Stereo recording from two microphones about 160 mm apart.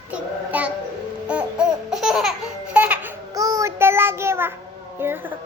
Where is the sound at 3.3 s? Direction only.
20° right (ahead or behind).